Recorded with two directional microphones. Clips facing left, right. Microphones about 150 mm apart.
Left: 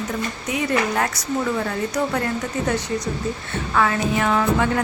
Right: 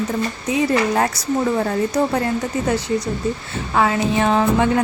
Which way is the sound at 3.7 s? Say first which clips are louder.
Right 3 dB; 25° right (ahead or behind).